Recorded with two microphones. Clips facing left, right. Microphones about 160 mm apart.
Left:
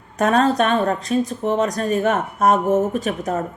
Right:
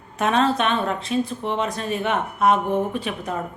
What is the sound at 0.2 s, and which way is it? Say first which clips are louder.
Speech: left 3 dB; 45° left (ahead or behind).